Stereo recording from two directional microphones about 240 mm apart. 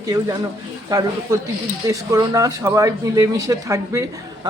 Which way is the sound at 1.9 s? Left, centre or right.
Centre.